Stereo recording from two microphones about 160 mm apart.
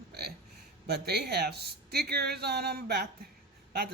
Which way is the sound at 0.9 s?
90° right.